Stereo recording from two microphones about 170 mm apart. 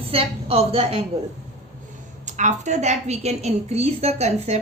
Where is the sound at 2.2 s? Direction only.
45° right (ahead or behind).